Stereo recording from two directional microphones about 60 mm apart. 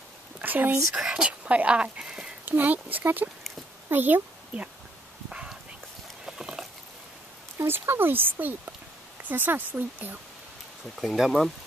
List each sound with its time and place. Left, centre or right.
0.4 s speech: right
0.9 s speech: centre
2.4 s speech: right
5.3 s dog: centre
6.2 s a sound: centre
7.5 s speech: right
11.0 s speech: centre